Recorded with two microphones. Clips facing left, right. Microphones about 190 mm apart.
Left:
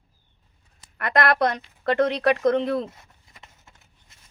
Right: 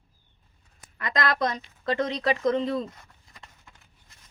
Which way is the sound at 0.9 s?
60° left (ahead or behind).